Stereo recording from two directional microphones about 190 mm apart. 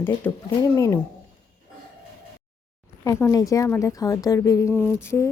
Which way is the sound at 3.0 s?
15° left (ahead or behind).